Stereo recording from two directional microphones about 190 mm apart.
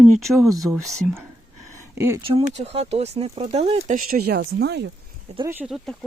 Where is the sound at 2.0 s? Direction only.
15° right (ahead or behind).